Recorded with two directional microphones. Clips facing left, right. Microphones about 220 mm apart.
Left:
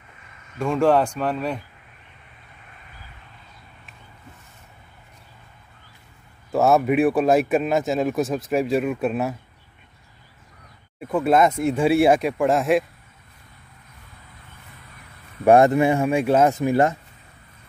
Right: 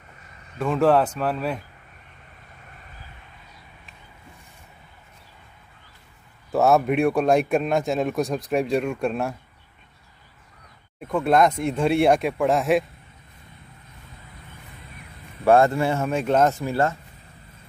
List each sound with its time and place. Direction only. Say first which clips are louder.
0.6 s speech: even; 5° right (ahead or behind)
6.5 s speech: left 1 dB; centre (ahead or behind)
11.0 s speech: left 1 dB; 5° left (ahead or behind)
15.4 s speech: left 3 dB; 15° left (ahead or behind)